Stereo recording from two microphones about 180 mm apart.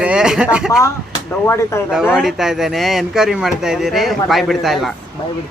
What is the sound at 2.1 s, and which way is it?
Speech, centre (ahead or behind).